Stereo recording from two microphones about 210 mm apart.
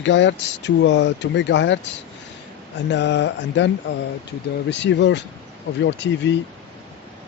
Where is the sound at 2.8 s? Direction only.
55° left (ahead or behind).